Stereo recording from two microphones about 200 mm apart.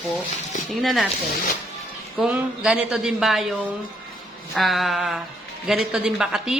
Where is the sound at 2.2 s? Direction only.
5° right (ahead or behind).